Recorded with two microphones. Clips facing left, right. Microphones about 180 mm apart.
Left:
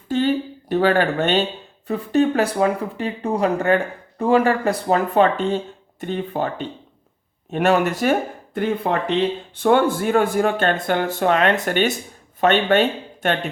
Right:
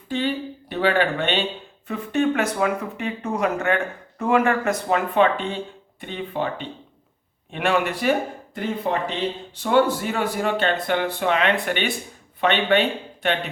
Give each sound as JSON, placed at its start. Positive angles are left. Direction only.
{"t": 0.1, "sound": "a sound", "side_deg": 45}
{"t": 1.9, "sound": "speech", "side_deg": 35}
{"t": 8.5, "sound": "speech", "side_deg": 60}